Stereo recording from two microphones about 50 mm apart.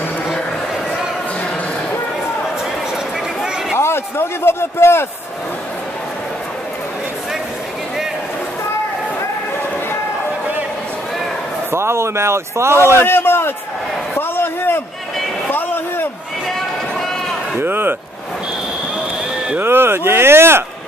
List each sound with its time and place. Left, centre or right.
3.7 s a sound: left
11.7 s speech: right
12.7 s a man's voice: left
15.5 s a sound: left
17.6 s speech: right
18.9 s basketball bounce: right
19.6 s speech: right